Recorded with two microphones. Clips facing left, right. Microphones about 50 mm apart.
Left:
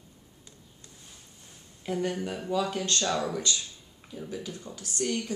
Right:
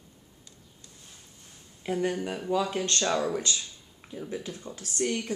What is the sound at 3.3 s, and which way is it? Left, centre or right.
A woman's voice, right.